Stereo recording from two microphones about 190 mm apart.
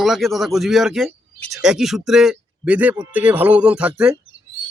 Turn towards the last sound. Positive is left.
turn(degrees=-5)  # may be behind; listen again after turning